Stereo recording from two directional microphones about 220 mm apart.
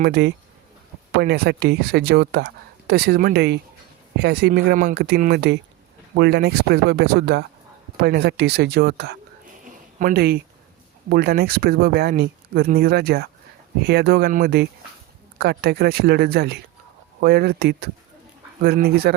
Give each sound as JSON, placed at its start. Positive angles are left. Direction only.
{"t": 0.0, "sound": "speech", "side_deg": -50}